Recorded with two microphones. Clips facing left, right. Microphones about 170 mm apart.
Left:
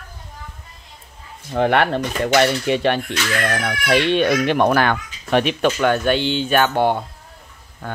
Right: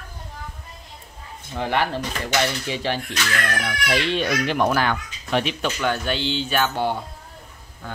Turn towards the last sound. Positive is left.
turn(degrees=60)  # may be behind; listen again after turning